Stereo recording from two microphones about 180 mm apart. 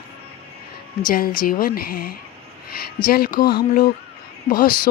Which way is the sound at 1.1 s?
50° left (ahead or behind).